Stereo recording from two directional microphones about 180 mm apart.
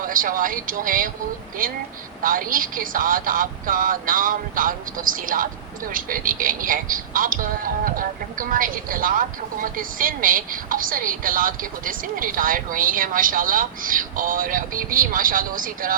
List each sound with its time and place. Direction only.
0.1 s speech: 50° right (ahead or behind)